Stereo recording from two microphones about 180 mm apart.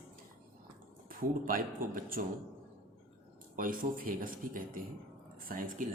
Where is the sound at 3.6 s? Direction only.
50° right (ahead or behind).